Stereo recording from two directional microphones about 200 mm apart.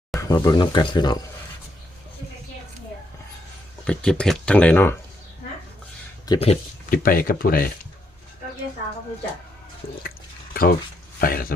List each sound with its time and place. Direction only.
0.2 s speech: 15° left (ahead or behind)
3.8 s speech: 5° left (ahead or behind)
6.2 s speech: 25° left (ahead or behind)
6.9 s speech: 45° left (ahead or behind)
10.5 s speech: 45° left (ahead or behind)